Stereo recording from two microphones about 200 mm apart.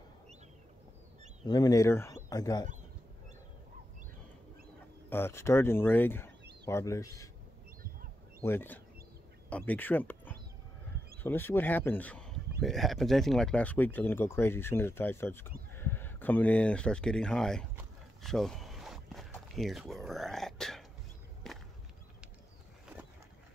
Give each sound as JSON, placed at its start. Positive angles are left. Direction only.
{"t": 1.4, "sound": "speech", "side_deg": 20}
{"t": 5.1, "sound": "speech", "side_deg": 10}
{"t": 8.4, "sound": "speech", "side_deg": 10}
{"t": 21.4, "sound": "a sound", "side_deg": 0}